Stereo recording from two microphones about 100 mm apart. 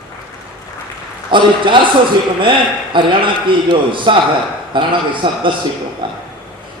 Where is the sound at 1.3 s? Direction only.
55° right (ahead or behind).